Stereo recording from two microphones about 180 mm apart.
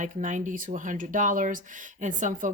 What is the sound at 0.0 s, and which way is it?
Speech, 45° right (ahead or behind).